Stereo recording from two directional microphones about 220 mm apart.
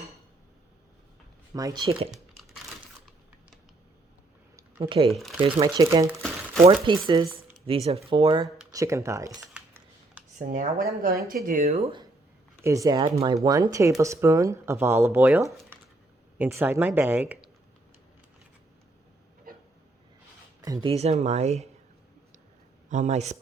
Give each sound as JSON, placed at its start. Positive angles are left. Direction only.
{"t": 1.5, "sound": "speech", "side_deg": -20}
{"t": 4.8, "sound": "speech", "side_deg": -25}
{"t": 5.1, "sound": "speech", "side_deg": 0}
{"t": 5.4, "sound": "speech", "side_deg": -20}
{"t": 10.3, "sound": "speech", "side_deg": -40}
{"t": 12.5, "sound": "speech", "side_deg": -15}
{"t": 19.5, "sound": "a sound", "side_deg": -40}
{"t": 20.8, "sound": "speech", "side_deg": -30}
{"t": 22.9, "sound": "speech", "side_deg": -35}